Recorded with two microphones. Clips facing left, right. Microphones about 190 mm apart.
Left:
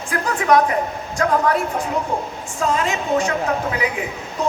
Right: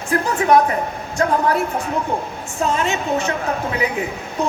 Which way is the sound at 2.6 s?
25° right (ahead or behind).